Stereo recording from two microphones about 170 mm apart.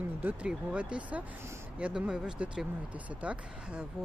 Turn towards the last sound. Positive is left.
turn(degrees=-5)  # may be behind; listen again after turning